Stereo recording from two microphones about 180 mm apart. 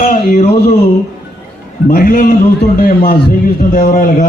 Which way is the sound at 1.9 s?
50° left (ahead or behind).